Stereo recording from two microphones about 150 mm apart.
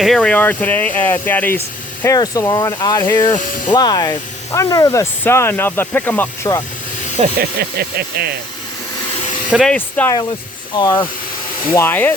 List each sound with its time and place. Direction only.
0.0 s speech: 5° left (ahead or behind)
7.3 s speech: 90° right
9.5 s speech: centre (ahead or behind)
9.7 s speech: 10° left (ahead or behind)
10.8 s speech: 30° left (ahead or behind)
11.7 s speech: 15° left (ahead or behind)